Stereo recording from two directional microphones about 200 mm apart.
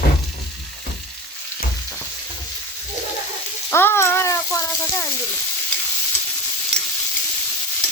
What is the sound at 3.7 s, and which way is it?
Speech, 10° left (ahead or behind).